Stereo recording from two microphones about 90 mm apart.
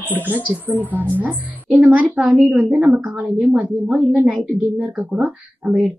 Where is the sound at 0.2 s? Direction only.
20° right (ahead or behind).